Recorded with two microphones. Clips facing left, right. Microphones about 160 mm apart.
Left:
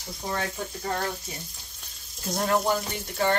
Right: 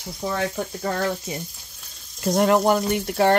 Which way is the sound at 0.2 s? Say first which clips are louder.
Right 5 dB; 90° right.